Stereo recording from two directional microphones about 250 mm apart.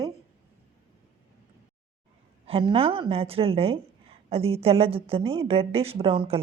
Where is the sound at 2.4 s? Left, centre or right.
Right.